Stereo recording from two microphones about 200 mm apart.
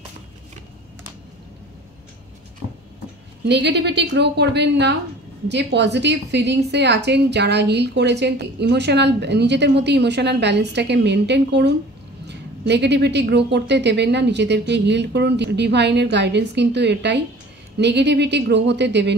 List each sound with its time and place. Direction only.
3.4 s a woman's voice: 60° right (ahead or behind)